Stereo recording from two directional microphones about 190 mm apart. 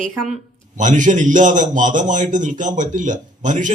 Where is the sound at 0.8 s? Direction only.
40° right (ahead or behind).